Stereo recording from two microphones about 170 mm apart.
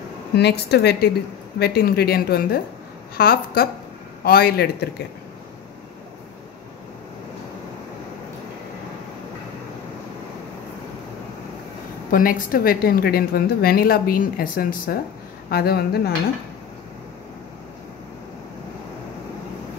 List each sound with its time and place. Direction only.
0.4 s a woman's voice: 75° left (ahead or behind)
12.1 s a woman's voice: 55° left (ahead or behind)